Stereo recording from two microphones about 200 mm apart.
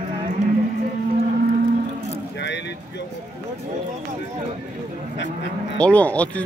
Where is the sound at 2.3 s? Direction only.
60° left (ahead or behind).